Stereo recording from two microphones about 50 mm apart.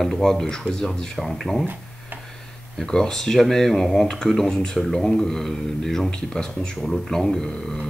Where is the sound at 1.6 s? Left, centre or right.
Right.